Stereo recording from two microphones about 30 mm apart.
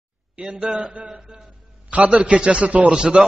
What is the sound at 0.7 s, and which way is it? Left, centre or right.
Speech, right.